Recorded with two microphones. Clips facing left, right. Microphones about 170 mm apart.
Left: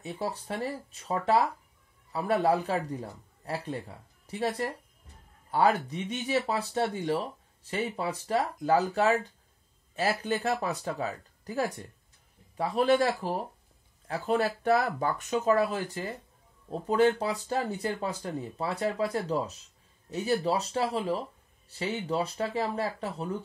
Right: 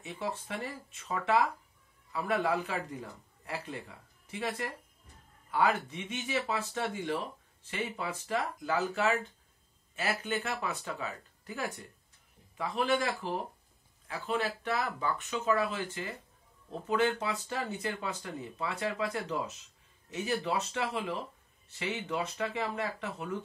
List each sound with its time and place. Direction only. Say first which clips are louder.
0.0 s speech: left 3 dB; 35° left (ahead or behind)